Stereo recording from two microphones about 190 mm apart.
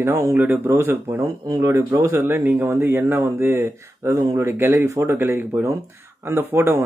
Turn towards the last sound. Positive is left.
turn(degrees=-15)  # may be behind; listen again after turning